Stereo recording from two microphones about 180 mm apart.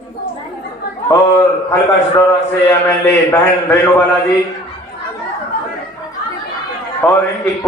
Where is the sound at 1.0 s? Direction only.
15° left (ahead or behind).